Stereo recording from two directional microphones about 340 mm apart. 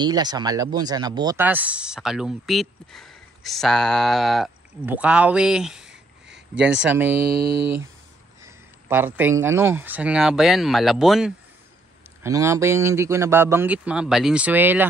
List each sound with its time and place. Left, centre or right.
0.0 s speech: centre
7.2 s a sound: right
7.5 s a man's voice: centre